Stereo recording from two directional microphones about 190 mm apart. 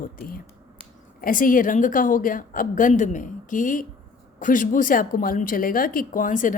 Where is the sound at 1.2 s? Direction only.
45° left (ahead or behind).